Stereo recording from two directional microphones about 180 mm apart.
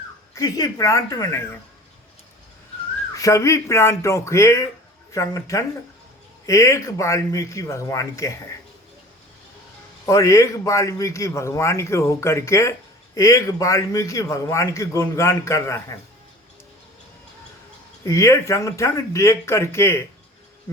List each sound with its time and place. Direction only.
0.3 s a woman's voice: 20° left (ahead or behind)
3.2 s a man's voice: 15° left (ahead or behind)
10.1 s a man's voice: 15° left (ahead or behind)
18.0 s a man's voice: 15° left (ahead or behind)